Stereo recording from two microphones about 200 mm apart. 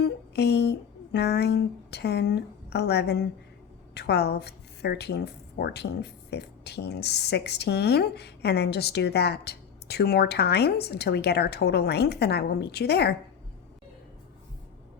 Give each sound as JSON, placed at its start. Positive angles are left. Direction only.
{"t": 0.0, "sound": "a woman's voice", "side_deg": 55}